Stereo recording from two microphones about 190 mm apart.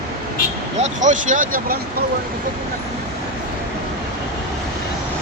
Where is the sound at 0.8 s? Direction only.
40° right (ahead or behind).